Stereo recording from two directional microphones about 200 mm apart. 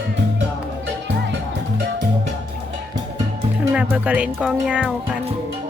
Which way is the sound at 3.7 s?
5° right (ahead or behind).